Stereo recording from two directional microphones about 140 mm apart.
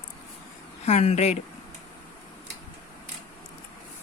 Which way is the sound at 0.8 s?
50° left (ahead or behind).